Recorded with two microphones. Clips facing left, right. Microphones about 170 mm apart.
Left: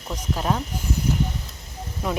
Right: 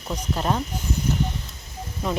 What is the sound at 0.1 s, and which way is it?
Speech, centre (ahead or behind).